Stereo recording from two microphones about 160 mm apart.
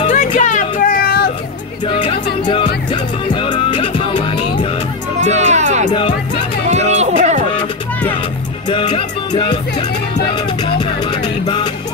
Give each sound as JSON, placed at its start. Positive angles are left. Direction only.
{"t": 0.1, "sound": "vehicle", "side_deg": 50}
{"t": 1.9, "sound": "music", "side_deg": 30}
{"t": 5.3, "sound": "music", "side_deg": -45}
{"t": 8.6, "sound": "music", "side_deg": 30}